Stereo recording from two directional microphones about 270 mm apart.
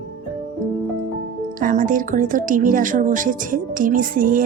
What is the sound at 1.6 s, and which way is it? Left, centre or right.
A woman's voice, right.